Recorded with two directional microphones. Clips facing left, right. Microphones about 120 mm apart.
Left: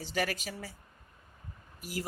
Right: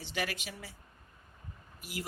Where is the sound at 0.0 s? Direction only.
40° left (ahead or behind).